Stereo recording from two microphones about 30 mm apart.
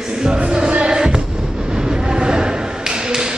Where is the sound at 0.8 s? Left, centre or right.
Right.